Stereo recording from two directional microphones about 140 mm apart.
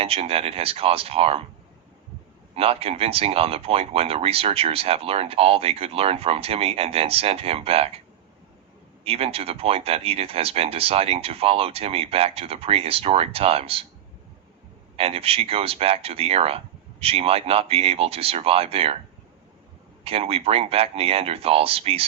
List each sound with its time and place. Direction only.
0.0 s speech: 45° right (ahead or behind)
2.6 s speech: 45° right (ahead or behind)
9.0 s speech: 45° right (ahead or behind)
14.9 s speech: 45° right (ahead or behind)
20.1 s speech: 45° right (ahead or behind)